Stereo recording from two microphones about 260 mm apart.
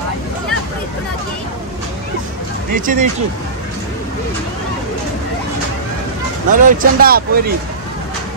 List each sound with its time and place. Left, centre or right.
2.7 s speech: right
6.5 s speech: right